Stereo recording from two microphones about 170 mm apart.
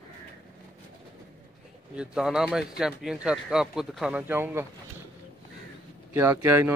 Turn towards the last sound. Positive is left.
turn(degrees=-15)  # may be behind; listen again after turning